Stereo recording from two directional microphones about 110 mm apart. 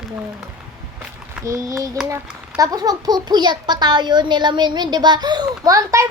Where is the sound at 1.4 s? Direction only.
30° right (ahead or behind).